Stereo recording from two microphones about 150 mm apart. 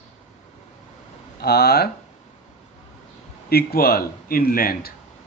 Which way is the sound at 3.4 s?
90° left.